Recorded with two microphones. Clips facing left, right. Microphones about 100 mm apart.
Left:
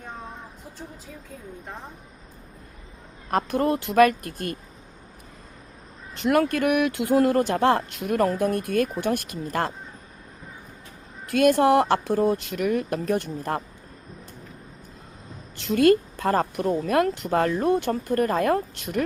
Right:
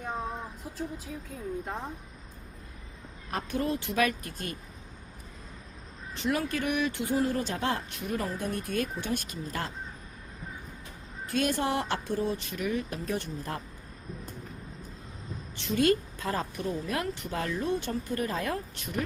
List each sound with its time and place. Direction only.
3.2 s speech: 55° left (ahead or behind)
6.2 s speech: 60° left (ahead or behind)
11.3 s speech: 60° left (ahead or behind)
15.6 s speech: 55° left (ahead or behind)